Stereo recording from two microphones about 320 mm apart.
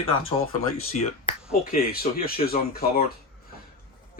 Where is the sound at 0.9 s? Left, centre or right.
Centre.